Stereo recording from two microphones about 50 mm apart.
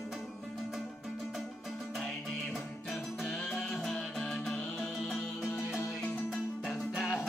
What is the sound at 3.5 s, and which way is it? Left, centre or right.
Music, centre.